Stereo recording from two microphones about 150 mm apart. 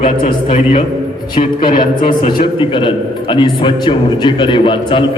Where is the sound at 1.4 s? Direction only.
70° left (ahead or behind).